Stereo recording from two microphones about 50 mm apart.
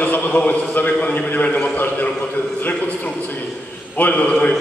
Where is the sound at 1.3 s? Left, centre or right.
Left.